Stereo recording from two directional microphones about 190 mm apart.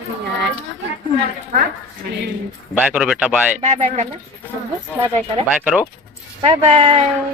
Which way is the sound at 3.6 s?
35° right (ahead or behind).